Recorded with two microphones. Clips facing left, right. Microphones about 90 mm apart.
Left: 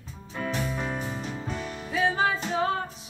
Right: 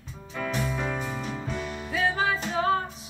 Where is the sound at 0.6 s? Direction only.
40° right (ahead or behind).